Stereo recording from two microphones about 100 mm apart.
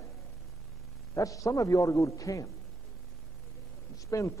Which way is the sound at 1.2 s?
35° left (ahead or behind).